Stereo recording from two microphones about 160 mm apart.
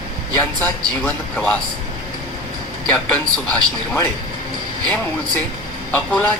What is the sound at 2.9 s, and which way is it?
A man's voice, 10° left (ahead or behind).